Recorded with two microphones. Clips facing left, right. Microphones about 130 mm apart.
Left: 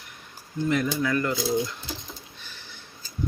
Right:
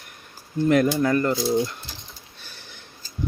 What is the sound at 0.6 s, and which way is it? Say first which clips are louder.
Speech: right 7 dB; 60° right (ahead or behind).